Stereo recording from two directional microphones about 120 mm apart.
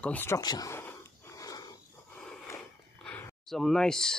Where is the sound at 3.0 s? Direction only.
15° left (ahead or behind).